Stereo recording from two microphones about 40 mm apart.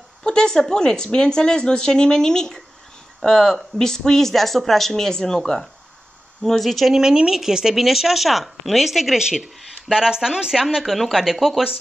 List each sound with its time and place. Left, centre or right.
0.2 s speech: centre
6.9 s speech: centre